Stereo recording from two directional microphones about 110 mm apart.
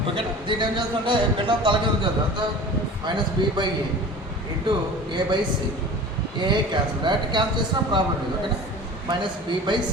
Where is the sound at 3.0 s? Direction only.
45° right (ahead or behind).